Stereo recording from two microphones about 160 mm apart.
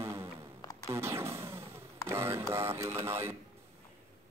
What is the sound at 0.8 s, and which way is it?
Music, 15° right (ahead or behind).